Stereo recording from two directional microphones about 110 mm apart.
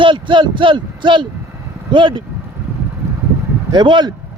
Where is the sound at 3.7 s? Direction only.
45° right (ahead or behind).